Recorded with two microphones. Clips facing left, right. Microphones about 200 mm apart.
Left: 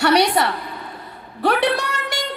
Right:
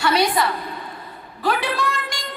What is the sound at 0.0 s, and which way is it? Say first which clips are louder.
Speech: left 3 dB; 70° left (ahead or behind).